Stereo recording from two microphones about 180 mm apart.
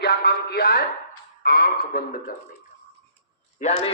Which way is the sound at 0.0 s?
65° left (ahead or behind).